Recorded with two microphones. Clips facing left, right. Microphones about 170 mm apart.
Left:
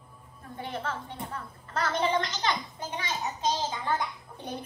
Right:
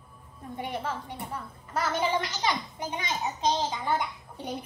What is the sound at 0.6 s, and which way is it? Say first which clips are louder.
A woman's voice: right 1 dB; 10° right (ahead or behind).